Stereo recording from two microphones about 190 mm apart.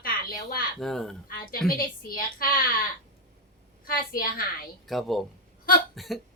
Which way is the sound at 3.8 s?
50° left (ahead or behind).